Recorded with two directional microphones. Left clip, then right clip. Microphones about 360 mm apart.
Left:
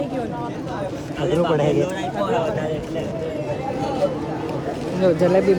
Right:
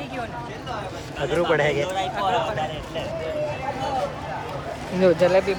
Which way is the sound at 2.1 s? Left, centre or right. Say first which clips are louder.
Left 1 dB; right.